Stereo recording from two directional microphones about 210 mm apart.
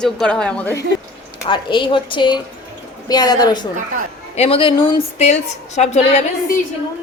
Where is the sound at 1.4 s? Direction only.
20° left (ahead or behind).